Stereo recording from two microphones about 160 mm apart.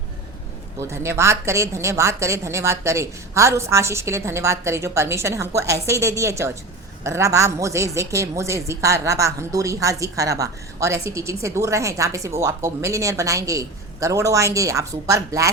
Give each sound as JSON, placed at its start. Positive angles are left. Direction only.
{"t": 0.8, "sound": "a woman's voice", "side_deg": -15}